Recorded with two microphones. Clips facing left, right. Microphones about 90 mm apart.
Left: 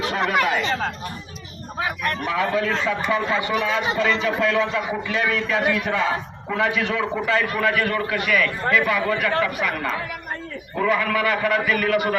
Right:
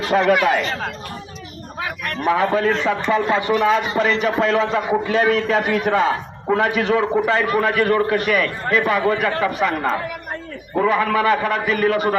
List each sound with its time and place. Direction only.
0.1 s speech: 45° right (ahead or behind)
2.2 s a man's voice: 40° right (ahead or behind)